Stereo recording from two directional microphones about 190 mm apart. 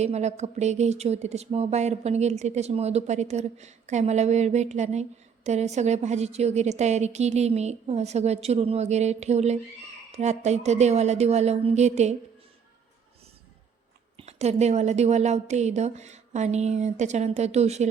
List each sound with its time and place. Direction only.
0.0 s speech: 35° right (ahead or behind)
14.2 s speech: 35° right (ahead or behind)